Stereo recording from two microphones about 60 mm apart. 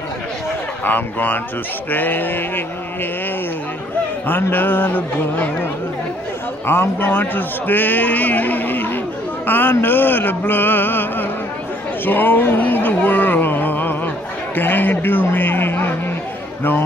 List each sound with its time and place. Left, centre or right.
0.8 s speech: left
4.3 s speech: left
12.0 s a sound: left